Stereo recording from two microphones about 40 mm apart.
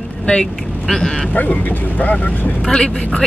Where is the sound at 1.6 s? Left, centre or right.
Left.